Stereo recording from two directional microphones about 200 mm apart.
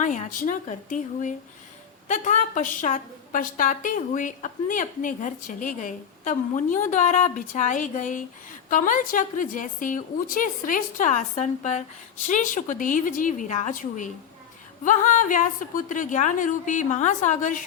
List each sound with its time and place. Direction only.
0.0 s a woman's voice: 40° left (ahead or behind)